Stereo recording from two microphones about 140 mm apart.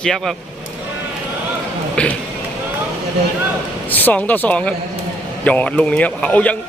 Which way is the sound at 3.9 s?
10° left (ahead or behind).